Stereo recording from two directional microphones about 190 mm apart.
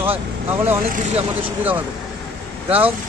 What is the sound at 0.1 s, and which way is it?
Speech, 10° right (ahead or behind).